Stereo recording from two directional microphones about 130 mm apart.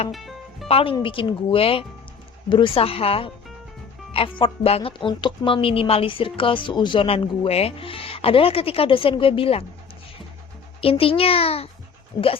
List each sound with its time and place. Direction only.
0.1 s music: centre (ahead or behind)
0.7 s speech: 50° left (ahead or behind)
10.8 s speech: 45° left (ahead or behind)